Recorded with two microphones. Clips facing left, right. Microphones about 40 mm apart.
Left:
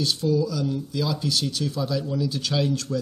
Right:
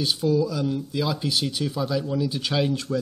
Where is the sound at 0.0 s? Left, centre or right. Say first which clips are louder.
Right 1 dB; centre.